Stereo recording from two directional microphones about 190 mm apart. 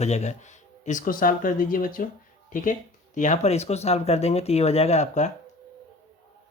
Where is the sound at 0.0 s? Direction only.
35° left (ahead or behind).